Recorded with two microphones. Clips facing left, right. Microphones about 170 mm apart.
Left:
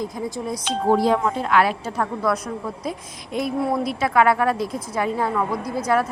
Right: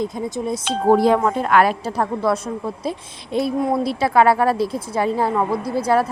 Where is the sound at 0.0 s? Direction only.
25° right (ahead or behind).